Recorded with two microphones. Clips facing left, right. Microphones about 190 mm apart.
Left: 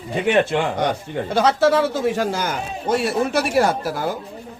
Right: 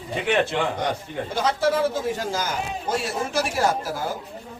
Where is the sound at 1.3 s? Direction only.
75° left (ahead or behind).